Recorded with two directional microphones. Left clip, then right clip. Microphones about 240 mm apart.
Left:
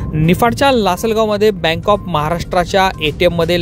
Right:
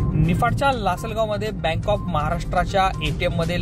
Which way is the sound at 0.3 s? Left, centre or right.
Left.